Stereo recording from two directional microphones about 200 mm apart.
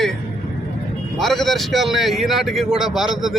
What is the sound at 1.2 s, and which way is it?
Speech, centre (ahead or behind).